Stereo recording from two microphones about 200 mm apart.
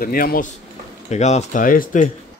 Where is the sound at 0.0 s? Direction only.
45° left (ahead or behind).